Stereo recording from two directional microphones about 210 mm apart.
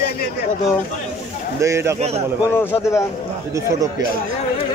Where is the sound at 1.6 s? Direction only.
10° right (ahead or behind).